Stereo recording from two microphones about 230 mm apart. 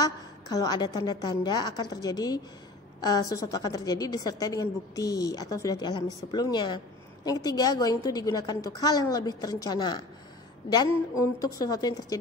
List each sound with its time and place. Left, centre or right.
0.0 s a woman's voice: centre